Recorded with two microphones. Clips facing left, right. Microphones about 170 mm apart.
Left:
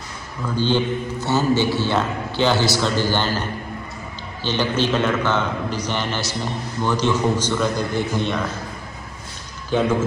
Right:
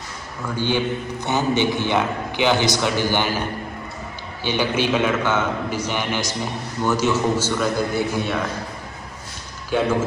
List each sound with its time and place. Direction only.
0.6 s a man's voice: 15° right (ahead or behind)
9.7 s a man's voice: 10° right (ahead or behind)